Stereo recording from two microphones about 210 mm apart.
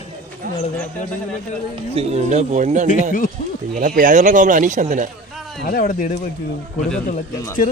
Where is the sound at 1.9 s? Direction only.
30° right (ahead or behind).